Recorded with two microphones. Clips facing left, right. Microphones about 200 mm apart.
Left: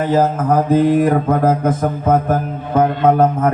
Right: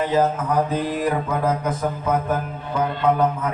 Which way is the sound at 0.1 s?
50° left (ahead or behind).